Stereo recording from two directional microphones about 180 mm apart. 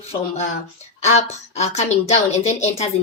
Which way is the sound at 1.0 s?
40° left (ahead or behind).